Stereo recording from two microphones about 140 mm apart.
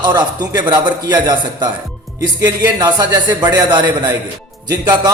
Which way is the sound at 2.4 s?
30° right (ahead or behind).